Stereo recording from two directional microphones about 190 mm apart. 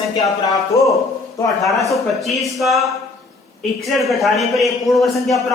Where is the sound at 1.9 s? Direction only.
Centre (ahead or behind).